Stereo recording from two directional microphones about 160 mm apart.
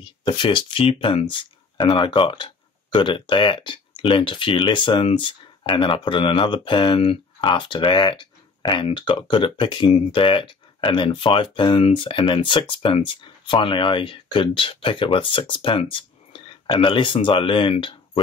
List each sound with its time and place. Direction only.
0.0 s speech: 30° left (ahead or behind)